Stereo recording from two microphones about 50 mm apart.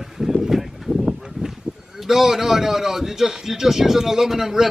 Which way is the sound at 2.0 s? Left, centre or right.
Centre.